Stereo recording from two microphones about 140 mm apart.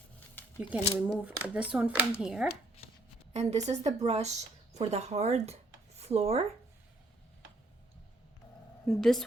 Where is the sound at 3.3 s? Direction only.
50° right (ahead or behind).